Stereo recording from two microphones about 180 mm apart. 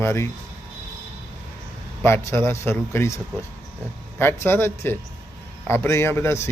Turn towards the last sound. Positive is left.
turn(degrees=15)  # may be behind; listen again after turning